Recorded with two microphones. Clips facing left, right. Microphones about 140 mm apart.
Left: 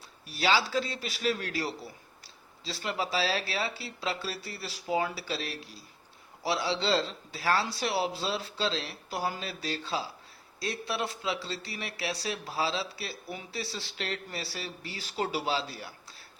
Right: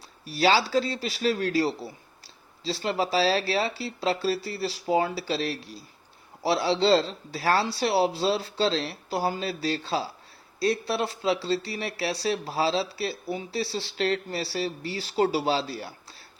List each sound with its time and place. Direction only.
0.3 s speech: 35° right (ahead or behind)